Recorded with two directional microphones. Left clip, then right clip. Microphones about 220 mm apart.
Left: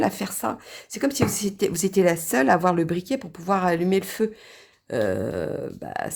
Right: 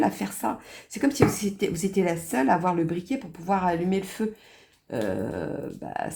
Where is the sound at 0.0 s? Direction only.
35° left (ahead or behind).